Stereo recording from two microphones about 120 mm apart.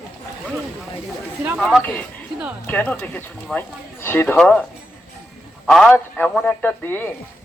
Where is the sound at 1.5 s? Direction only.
Centre (ahead or behind).